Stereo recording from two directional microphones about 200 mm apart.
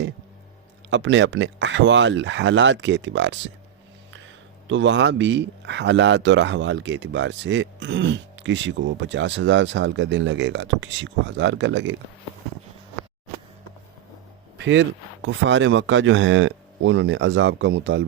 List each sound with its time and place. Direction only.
0.9 s speech: 65° right (ahead or behind)
4.7 s speech: 65° right (ahead or behind)
14.6 s speech: 60° right (ahead or behind)